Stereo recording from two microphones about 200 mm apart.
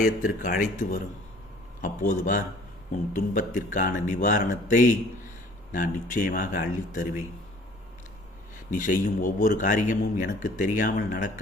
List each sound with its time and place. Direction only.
0.0 s speech: 45° left (ahead or behind)
8.7 s speech: 40° left (ahead or behind)